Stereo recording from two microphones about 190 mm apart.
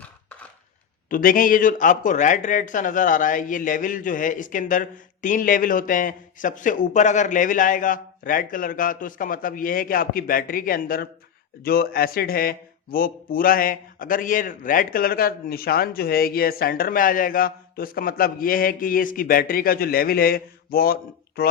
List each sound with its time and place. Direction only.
1.1 s speech: 45° left (ahead or behind)